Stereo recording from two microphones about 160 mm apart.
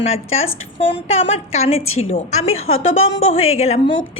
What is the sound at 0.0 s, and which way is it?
A woman's voice, 40° left (ahead or behind).